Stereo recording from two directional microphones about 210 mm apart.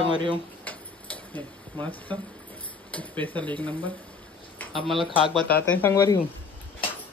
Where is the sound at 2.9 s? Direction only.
5° left (ahead or behind).